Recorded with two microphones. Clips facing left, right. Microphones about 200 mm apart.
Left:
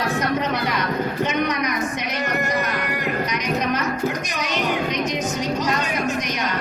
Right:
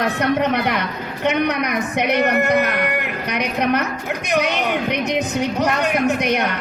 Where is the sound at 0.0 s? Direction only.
60° right (ahead or behind).